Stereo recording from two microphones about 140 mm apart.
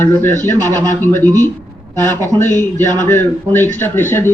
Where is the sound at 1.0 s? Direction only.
15° left (ahead or behind).